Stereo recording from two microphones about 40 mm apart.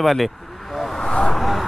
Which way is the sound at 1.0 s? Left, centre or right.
Left.